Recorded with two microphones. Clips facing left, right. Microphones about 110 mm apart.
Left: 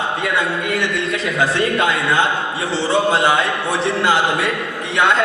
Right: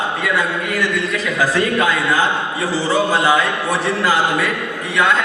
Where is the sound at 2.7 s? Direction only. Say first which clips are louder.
Left 1 dB; 25° left (ahead or behind).